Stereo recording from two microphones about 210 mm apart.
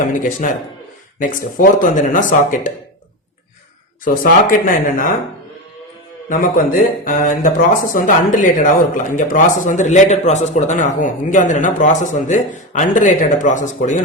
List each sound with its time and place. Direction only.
0.0 s speech: 40° left (ahead or behind)
4.0 s speech: 40° left (ahead or behind)
6.2 s speech: 40° left (ahead or behind)